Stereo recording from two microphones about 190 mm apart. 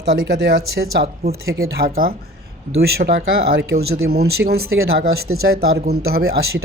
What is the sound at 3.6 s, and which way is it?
Speech, 75° right (ahead or behind).